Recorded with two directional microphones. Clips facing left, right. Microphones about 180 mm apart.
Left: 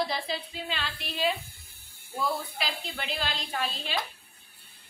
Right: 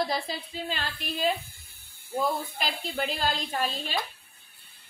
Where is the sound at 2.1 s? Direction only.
45° right (ahead or behind).